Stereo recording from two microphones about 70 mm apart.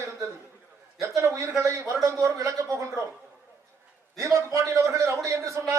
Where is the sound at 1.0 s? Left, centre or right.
Right.